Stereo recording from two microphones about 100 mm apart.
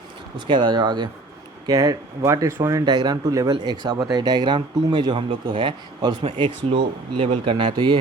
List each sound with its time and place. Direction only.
0.3 s speech: 50° right (ahead or behind); by 2.8 s 30° right (ahead or behind)
2.8 s speech: 45° right (ahead or behind)
6.2 s speech: 65° right (ahead or behind)